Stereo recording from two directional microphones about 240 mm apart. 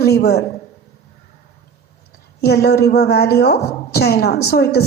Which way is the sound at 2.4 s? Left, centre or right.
Left.